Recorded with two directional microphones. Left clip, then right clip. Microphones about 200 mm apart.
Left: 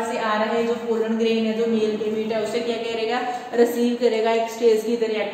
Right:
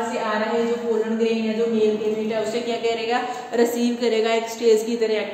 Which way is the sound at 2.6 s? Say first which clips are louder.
Right 2 dB; 25° right (ahead or behind).